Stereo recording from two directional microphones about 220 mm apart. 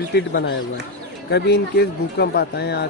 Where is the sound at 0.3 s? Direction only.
50° left (ahead or behind).